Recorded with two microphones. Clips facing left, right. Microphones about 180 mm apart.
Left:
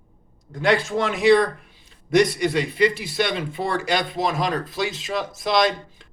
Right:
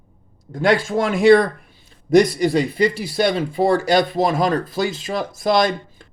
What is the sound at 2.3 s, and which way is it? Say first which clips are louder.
Speech: right 3 dB; 40° right (ahead or behind).